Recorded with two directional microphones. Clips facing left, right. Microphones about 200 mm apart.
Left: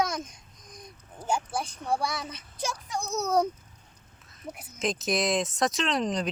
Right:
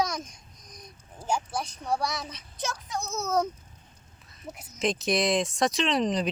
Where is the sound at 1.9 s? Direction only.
5° left (ahead or behind).